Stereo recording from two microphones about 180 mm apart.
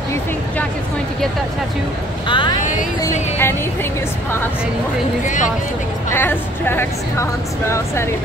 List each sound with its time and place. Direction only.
2.2 s speech: 25° left (ahead or behind)
5.2 s speech: 45° left (ahead or behind)
6.0 s a woman's voice: 10° left (ahead or behind)